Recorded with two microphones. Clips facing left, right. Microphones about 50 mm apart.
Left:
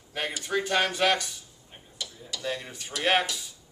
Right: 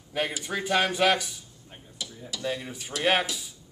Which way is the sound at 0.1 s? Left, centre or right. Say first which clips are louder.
Even; centre.